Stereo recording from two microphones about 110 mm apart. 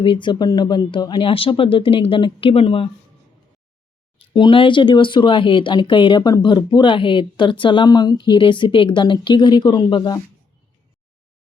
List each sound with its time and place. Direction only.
0.0 s speech: 45° left (ahead or behind)
4.4 s speech: 50° left (ahead or behind)
7.9 s speech: 35° left (ahead or behind)